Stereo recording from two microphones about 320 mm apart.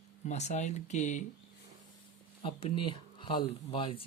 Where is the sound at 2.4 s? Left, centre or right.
Centre.